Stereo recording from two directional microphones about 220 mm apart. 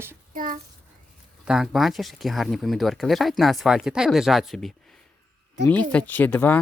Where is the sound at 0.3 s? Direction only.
40° right (ahead or behind).